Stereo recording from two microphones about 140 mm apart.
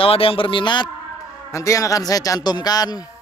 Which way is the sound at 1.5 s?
20° left (ahead or behind).